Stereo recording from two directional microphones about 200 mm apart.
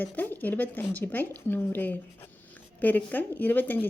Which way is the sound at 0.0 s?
10° left (ahead or behind).